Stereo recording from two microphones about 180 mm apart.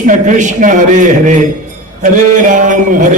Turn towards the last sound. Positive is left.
turn(degrees=-45)  # may be behind; listen again after turning